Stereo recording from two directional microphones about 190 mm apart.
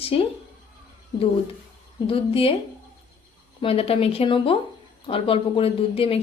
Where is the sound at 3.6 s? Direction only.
30° left (ahead or behind).